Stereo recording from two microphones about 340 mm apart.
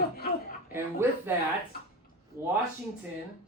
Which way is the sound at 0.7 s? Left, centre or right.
Centre.